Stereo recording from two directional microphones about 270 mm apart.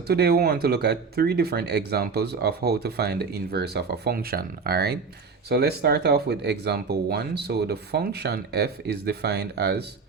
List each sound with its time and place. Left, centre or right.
0.1 s speech: right